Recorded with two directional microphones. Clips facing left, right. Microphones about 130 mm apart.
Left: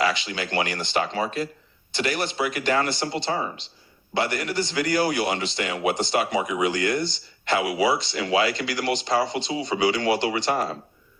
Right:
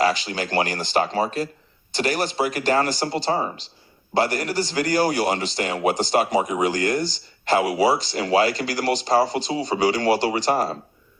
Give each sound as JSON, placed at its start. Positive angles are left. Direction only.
{"t": 0.0, "sound": "a man's voice", "side_deg": -40}